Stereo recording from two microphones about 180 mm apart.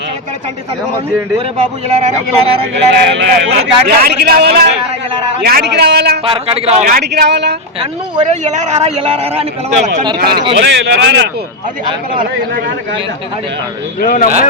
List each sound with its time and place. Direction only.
1.9 s a man's voice: 40° right (ahead or behind)
2.7 s a man's voice: 75° right (ahead or behind)
6.2 s a man's voice: 30° right (ahead or behind)
6.8 s a man's voice: 60° right (ahead or behind)
7.8 s a man's voice: 35° right (ahead or behind)
10.2 s a man's voice: 60° right (ahead or behind)
10.5 s a man's voice: 75° right (ahead or behind)
14.0 s speech: 50° left (ahead or behind)